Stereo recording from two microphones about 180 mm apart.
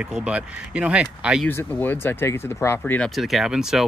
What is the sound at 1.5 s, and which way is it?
Speech, 10° left (ahead or behind).